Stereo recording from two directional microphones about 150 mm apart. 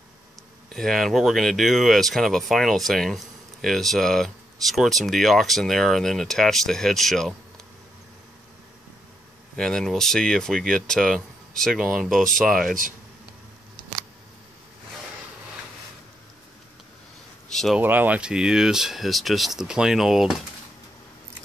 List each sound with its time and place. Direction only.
0.7 s speech: centre (ahead or behind)
9.6 s speech: 5° left (ahead or behind)
17.5 s a sound: centre (ahead or behind)
17.7 s speech: 10° right (ahead or behind)